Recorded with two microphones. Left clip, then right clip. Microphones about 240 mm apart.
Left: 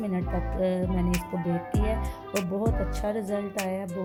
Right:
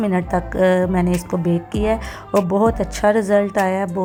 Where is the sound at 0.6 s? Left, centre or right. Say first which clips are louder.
Right 12 dB; centre.